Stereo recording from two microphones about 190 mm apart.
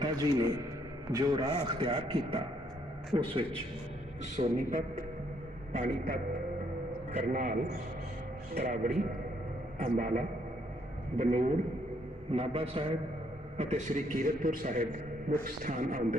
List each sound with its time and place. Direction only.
0.0 s a man's voice: 20° right (ahead or behind)
4.2 s a man's voice: 40° right (ahead or behind)
8.5 s a man's voice: 45° right (ahead or behind)